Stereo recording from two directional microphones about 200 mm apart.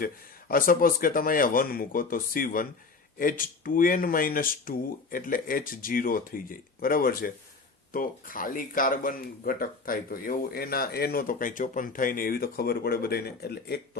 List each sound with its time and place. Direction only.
0.0 s speech: 45° left (ahead or behind)